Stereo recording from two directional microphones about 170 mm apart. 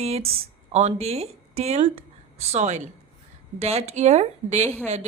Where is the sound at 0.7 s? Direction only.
40° right (ahead or behind).